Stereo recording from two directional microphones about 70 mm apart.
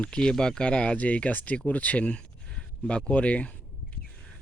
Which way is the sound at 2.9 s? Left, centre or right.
Centre.